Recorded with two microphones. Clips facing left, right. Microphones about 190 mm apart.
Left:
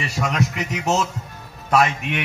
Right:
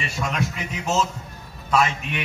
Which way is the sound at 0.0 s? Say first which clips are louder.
Left 3 dB; 70° left (ahead or behind).